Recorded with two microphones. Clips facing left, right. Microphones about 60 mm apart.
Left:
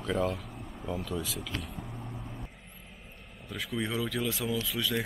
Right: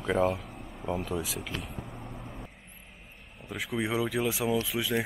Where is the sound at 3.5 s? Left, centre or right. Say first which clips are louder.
Right 3 dB; centre.